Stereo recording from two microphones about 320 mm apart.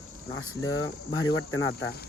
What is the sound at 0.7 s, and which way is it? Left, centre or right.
Speech, left.